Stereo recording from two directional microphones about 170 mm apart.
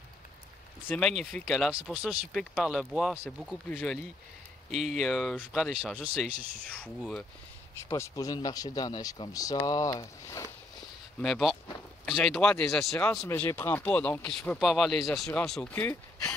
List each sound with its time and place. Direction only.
0.8 s speech: 5° left (ahead or behind)
4.6 s speech: 40° right (ahead or behind)
5.0 s speech: centre (ahead or behind)
7.9 s speech: 20° left (ahead or behind)
11.1 s speech: centre (ahead or behind)